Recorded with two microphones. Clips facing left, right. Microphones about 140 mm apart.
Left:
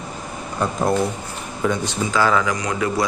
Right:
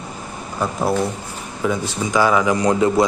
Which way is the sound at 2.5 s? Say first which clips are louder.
Right 7 dB; 30° right (ahead or behind).